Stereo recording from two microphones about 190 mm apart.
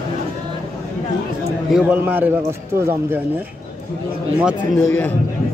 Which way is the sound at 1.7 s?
10° right (ahead or behind).